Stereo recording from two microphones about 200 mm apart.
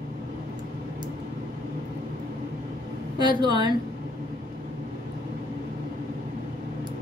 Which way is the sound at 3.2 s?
20° right (ahead or behind).